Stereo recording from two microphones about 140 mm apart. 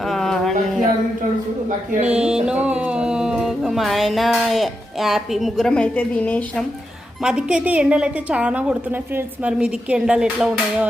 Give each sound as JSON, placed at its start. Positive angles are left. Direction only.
{"t": 0.0, "sound": "music", "side_deg": 0}
{"t": 2.0, "sound": "music", "side_deg": -5}
{"t": 7.2, "sound": "a woman's voice", "side_deg": -5}